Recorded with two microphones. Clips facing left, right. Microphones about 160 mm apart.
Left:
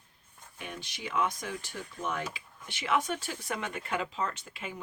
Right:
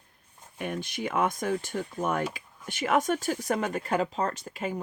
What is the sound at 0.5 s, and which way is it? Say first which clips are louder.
Speech: right 10 dB; 50° right (ahead or behind).